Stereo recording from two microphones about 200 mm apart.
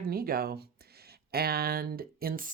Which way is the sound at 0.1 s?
50° right (ahead or behind).